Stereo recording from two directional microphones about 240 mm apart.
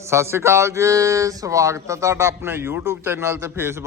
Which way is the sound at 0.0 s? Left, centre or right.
Centre.